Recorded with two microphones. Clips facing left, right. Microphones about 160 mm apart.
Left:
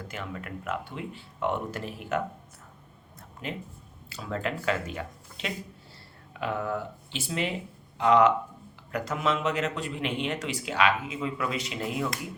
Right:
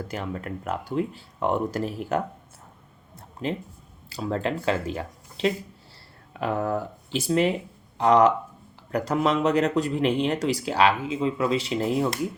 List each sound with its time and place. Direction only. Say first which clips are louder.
0.1 s speech: right 6 dB; 35° right (ahead or behind)
3.4 s speech: right 7 dB; 30° right (ahead or behind)